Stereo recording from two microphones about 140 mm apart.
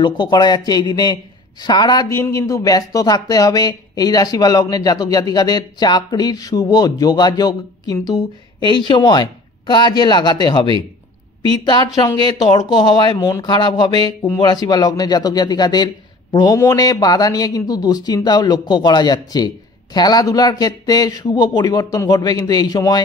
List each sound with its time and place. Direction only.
0.0 s a man's voice: 30° left (ahead or behind)